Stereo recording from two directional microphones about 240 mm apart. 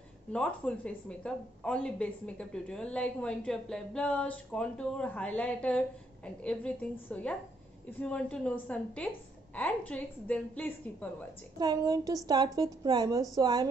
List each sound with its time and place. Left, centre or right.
0.3 s speech: centre
11.5 s a woman's voice: centre